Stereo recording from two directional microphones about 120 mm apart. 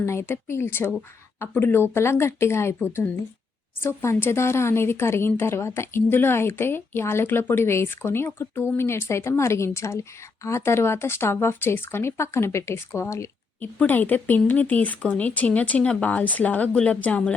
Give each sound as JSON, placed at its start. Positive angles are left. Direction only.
{"t": 0.0, "sound": "speech", "side_deg": 20}
{"t": 3.8, "sound": "speech", "side_deg": 20}